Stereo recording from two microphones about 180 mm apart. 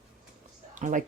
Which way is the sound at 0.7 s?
45° right (ahead or behind).